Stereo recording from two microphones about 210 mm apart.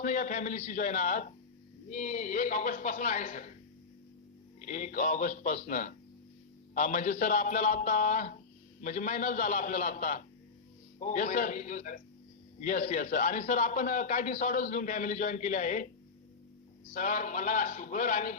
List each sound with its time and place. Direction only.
0.0 s a man's voice: 35° left (ahead or behind)
4.6 s a man's voice: 35° left (ahead or behind)
16.9 s a man's voice: 35° left (ahead or behind)